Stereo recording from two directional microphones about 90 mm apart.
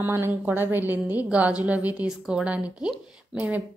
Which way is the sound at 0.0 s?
30° right (ahead or behind).